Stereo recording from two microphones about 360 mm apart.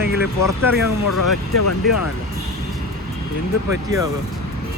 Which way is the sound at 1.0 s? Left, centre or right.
Left.